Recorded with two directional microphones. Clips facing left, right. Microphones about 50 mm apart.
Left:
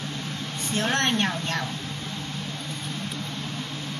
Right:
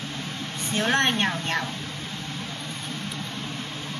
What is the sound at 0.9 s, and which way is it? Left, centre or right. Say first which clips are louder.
Speech: right 2 dB; right.